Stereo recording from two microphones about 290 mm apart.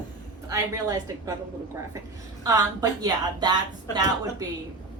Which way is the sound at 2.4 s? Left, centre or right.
Centre.